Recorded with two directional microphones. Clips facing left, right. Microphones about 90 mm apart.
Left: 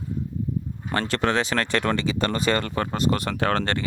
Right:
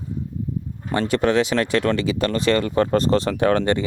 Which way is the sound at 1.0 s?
10° right (ahead or behind).